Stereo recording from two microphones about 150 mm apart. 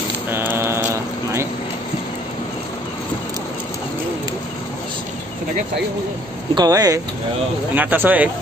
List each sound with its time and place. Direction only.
0.3 s a sound: 15° right (ahead or behind)
6.5 s speech: 25° right (ahead or behind)
7.7 s speech: 10° right (ahead or behind)